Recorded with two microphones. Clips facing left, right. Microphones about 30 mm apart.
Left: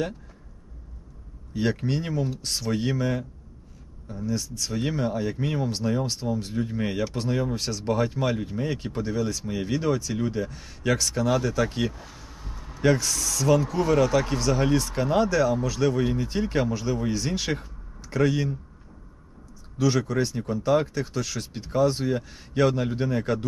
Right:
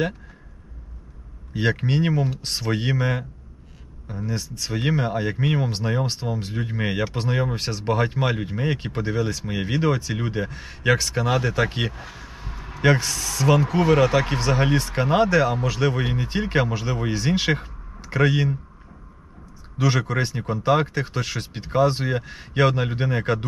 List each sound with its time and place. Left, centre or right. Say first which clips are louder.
1.5 s speech: right 3 dB; right
12.0 s a sound: right 5 dB; right
13.1 s speech: right 2 dB; right
19.8 s speech: right 1 dB; right